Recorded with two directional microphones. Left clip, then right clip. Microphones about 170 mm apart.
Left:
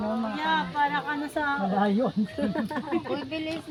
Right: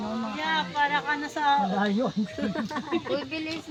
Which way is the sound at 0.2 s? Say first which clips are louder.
Right 1 dB; 50° left (ahead or behind).